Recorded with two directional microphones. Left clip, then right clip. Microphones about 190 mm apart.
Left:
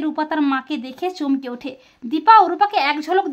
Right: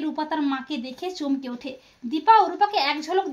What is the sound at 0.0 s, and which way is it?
Speech, 25° left (ahead or behind).